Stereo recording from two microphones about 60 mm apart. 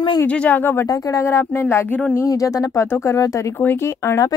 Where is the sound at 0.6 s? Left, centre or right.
Left.